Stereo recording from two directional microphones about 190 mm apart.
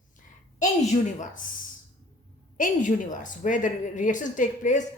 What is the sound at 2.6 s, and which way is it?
A woman's voice, 45° left (ahead or behind).